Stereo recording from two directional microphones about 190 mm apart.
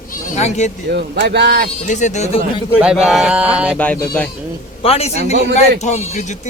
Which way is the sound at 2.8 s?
5° right (ahead or behind).